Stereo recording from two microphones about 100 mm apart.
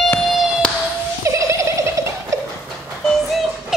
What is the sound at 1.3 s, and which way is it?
Gobble, 30° right (ahead or behind).